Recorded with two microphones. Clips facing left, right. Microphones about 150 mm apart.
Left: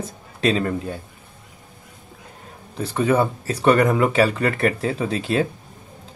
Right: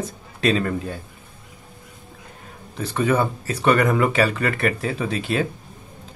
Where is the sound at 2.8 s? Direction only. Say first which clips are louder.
Left 1 dB; 30° left (ahead or behind).